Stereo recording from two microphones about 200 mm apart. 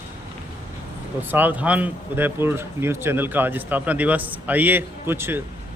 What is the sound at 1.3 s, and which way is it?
Speech, 10° right (ahead or behind).